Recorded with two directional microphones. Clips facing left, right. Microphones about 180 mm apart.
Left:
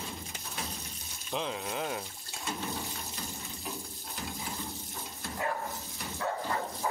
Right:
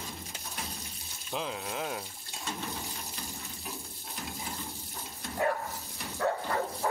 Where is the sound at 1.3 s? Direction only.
Centre (ahead or behind).